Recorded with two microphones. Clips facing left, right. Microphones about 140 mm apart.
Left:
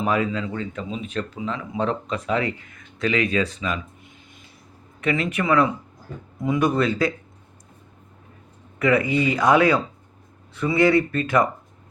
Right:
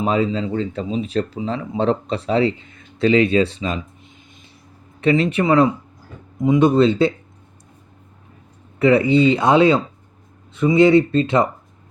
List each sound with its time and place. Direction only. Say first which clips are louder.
0.0 s speech: right 4 dB; 25° right (ahead or behind)
4.9 s speech: right 7 dB; 30° right (ahead or behind)
8.8 s speech: right 6 dB; 30° right (ahead or behind)